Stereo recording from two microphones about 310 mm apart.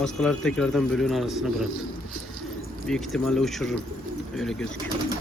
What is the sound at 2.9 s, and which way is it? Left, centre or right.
Speech, centre.